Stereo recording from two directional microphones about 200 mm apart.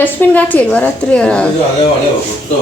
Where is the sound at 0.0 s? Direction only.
10° left (ahead or behind).